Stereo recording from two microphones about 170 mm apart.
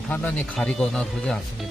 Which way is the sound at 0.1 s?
10° left (ahead or behind).